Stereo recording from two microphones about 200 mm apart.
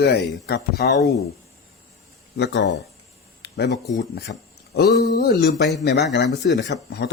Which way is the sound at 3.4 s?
55° left (ahead or behind).